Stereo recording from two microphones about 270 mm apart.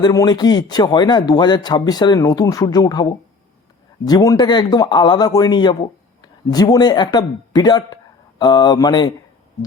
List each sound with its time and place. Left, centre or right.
0.0 s speech: centre